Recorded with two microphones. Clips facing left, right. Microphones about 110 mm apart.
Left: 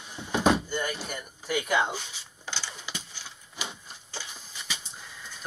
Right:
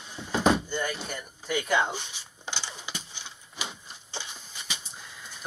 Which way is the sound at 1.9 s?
25° right (ahead or behind).